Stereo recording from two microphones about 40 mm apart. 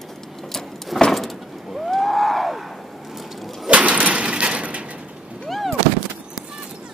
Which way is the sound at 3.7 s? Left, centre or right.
Right.